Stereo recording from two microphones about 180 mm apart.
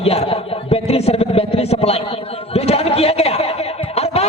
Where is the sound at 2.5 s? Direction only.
35° left (ahead or behind).